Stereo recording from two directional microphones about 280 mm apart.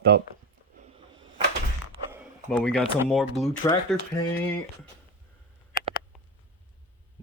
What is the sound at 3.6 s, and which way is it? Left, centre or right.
Speech, centre.